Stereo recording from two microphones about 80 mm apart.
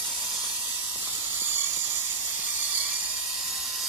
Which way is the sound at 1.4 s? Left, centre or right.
Right.